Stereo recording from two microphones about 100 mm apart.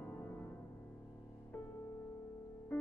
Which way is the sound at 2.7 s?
20° left (ahead or behind).